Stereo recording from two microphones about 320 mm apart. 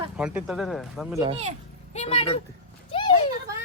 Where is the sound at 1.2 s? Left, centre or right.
Centre.